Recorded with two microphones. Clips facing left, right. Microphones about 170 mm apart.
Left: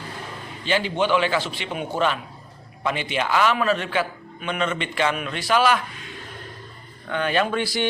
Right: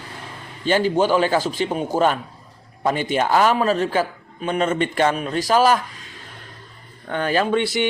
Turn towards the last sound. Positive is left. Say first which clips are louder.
# right 4 dB
turn(degrees=-20)  # may be behind; listen again after turning